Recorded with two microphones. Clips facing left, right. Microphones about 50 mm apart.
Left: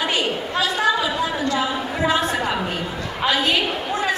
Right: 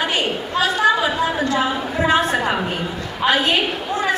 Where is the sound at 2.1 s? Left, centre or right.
Right.